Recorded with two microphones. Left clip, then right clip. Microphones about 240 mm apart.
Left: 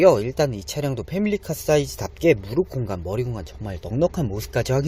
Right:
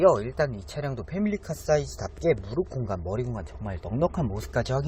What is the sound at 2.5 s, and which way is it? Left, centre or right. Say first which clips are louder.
Speech: left 5 dB; left.